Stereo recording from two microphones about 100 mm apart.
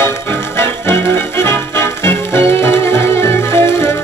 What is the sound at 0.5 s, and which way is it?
Music, 25° left (ahead or behind).